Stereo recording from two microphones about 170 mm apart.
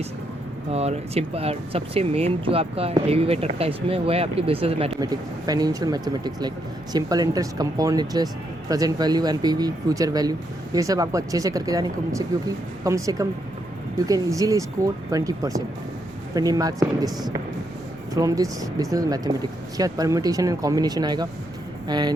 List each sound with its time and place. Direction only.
0.7 s speech: 35° right (ahead or behind)
4.9 s speech: 20° right (ahead or behind)